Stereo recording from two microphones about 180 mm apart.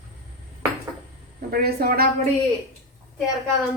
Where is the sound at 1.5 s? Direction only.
60° right (ahead or behind).